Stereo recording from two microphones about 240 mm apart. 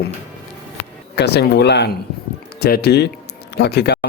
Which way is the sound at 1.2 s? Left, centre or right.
Left.